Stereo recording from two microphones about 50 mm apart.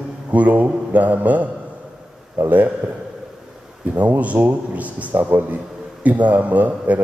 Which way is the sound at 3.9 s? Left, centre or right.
Right.